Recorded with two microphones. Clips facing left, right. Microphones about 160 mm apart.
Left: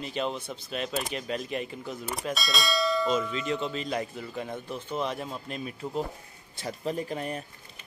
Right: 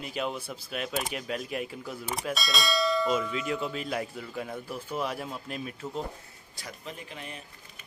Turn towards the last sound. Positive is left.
turn(degrees=40)  # may be behind; listen again after turning